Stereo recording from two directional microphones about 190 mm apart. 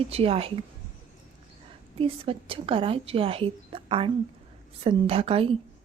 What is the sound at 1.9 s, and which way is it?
A woman's voice, 30° right (ahead or behind).